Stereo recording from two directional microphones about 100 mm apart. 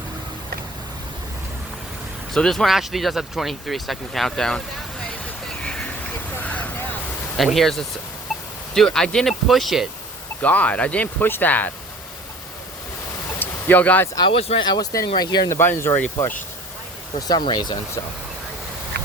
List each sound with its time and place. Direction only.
2.3 s speech: 5° left (ahead or behind)
5.6 s a sound: 5° left (ahead or behind)
6.3 s vehicle: 15° left (ahead or behind)
7.3 s speech: centre (ahead or behind)
10.4 s speech: 15° left (ahead or behind)
13.4 s speech: 15° left (ahead or behind)
14.2 s speech: 65° left (ahead or behind)
14.6 s speech: 40° left (ahead or behind)
15.4 s speech: 25° left (ahead or behind)
17.2 s speech: 40° left (ahead or behind)